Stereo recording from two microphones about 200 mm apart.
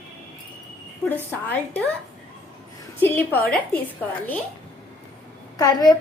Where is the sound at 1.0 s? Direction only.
10° left (ahead or behind).